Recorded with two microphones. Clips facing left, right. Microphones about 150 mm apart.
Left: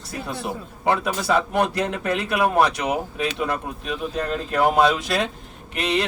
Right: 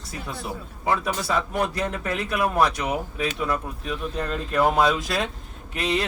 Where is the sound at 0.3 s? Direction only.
70° left (ahead or behind).